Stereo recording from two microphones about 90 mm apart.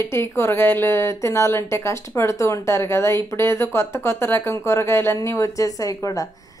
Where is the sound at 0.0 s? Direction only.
30° left (ahead or behind).